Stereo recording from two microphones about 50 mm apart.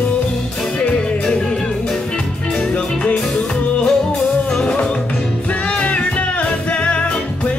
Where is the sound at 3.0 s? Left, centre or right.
Left.